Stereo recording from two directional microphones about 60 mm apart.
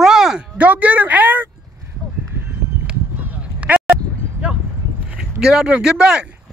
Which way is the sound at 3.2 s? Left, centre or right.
Right.